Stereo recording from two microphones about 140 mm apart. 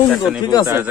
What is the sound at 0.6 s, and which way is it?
Speech, 15° right (ahead or behind).